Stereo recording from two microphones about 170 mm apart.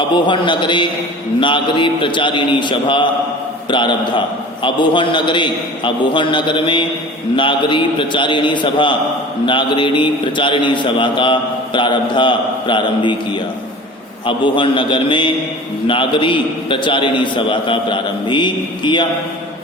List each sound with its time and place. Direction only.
0.3 s a man's voice: 30° left (ahead or behind)